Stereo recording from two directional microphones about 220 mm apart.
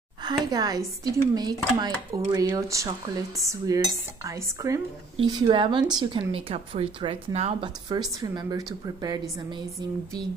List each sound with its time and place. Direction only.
0.5 s a woman's voice: 15° right (ahead or behind)